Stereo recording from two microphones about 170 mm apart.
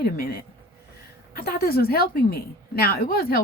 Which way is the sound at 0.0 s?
60° left (ahead or behind).